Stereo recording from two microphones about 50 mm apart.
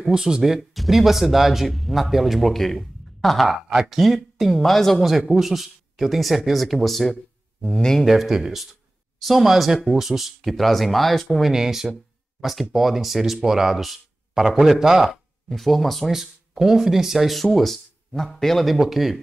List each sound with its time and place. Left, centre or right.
0.1 s speech: centre
7.6 s speech: centre
8.0 s speech: centre
11.5 s speech: centre
15.4 s speech: centre
16.1 s speech: centre